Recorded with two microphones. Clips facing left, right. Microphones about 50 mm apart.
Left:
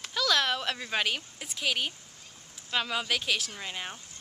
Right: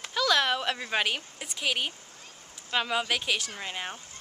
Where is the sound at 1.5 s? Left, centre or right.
Centre.